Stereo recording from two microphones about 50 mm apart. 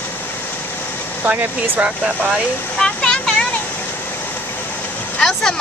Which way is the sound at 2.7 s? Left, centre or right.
Centre.